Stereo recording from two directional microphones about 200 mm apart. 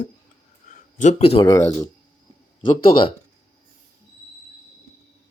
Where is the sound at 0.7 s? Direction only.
40° left (ahead or behind).